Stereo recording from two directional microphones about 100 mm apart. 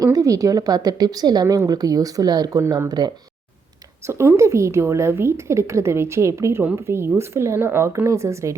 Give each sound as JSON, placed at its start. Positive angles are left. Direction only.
{"t": 0.0, "sound": "a woman's voice", "side_deg": -35}
{"t": 4.0, "sound": "a woman's voice", "side_deg": -25}